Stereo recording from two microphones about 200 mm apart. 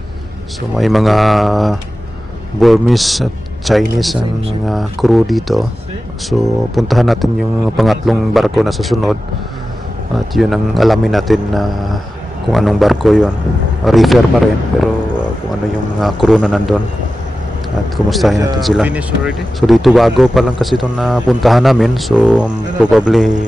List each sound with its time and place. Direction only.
0.7 s a man's voice: centre (ahead or behind)
4.2 s speech: 30° right (ahead or behind)
4.6 s a man's voice: centre (ahead or behind)
10.3 s a man's voice: centre (ahead or behind)
16.0 s a man's voice: centre (ahead or behind)
17.9 s a man's voice: centre (ahead or behind)